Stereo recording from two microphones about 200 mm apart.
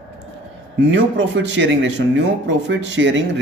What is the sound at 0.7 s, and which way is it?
Speech, 70° right (ahead or behind).